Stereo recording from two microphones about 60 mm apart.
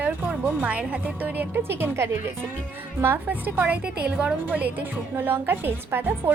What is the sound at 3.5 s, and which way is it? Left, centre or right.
A woman's voice, right.